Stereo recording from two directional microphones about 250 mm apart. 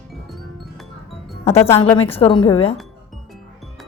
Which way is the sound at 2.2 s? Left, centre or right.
Left.